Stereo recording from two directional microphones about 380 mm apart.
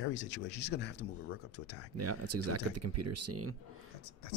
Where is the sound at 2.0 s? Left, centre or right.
Right.